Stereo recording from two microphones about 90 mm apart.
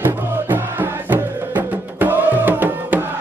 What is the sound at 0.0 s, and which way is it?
Music, 20° right (ahead or behind).